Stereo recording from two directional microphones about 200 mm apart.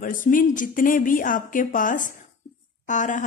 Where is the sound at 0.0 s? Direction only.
40° left (ahead or behind).